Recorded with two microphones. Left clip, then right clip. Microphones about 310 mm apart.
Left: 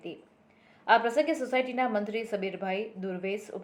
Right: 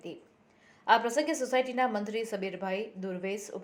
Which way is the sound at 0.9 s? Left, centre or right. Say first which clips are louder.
Left 2 dB; centre.